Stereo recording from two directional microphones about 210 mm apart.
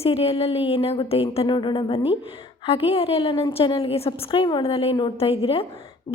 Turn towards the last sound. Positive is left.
turn(degrees=25)  # may be behind; listen again after turning